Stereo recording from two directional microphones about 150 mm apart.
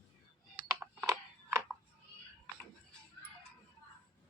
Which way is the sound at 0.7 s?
20° right (ahead or behind).